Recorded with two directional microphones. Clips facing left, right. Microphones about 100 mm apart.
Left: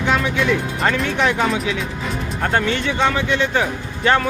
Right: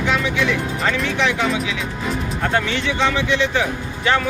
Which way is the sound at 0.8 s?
45° left (ahead or behind).